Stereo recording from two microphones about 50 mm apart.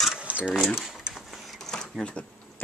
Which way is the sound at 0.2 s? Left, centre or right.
Right.